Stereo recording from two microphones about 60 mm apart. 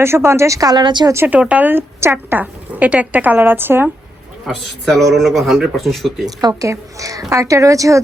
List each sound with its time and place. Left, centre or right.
0.0 s a woman's voice: right
1.3 s a woman's voice: right
4.4 s a man's voice: centre
6.6 s a woman's voice: right